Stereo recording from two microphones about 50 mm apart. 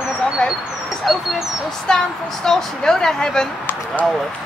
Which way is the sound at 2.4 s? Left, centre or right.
Centre.